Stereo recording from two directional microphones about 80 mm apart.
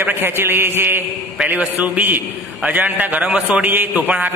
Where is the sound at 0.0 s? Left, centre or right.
Right.